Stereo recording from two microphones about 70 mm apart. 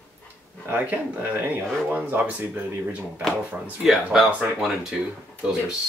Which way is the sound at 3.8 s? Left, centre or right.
Centre.